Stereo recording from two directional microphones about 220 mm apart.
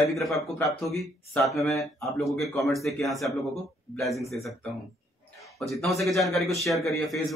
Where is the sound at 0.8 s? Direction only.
Centre (ahead or behind).